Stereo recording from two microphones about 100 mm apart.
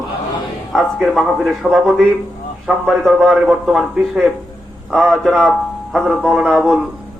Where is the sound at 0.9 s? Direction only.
5° right (ahead or behind).